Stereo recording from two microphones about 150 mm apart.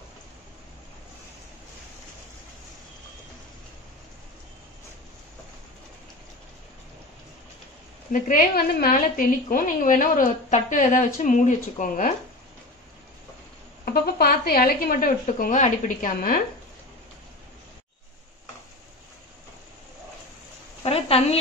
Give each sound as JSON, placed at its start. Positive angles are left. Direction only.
{"t": 8.1, "sound": "a woman's voice", "side_deg": 65}
{"t": 13.8, "sound": "speech", "side_deg": 90}
{"t": 20.8, "sound": "a sound", "side_deg": 40}